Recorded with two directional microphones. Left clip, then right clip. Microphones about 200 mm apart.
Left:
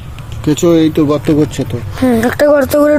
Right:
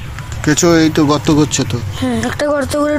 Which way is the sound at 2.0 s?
50° left (ahead or behind).